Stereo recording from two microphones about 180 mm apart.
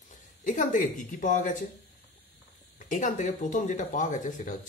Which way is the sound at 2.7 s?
45° left (ahead or behind).